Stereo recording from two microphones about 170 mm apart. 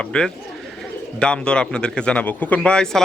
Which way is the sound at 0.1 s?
5° left (ahead or behind).